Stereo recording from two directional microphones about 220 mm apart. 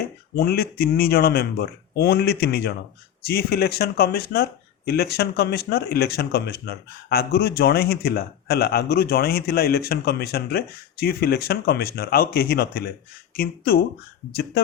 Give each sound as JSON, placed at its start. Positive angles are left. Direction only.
{"t": 0.3, "sound": "speech", "side_deg": 45}